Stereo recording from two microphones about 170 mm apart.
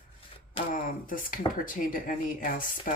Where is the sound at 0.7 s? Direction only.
55° left (ahead or behind).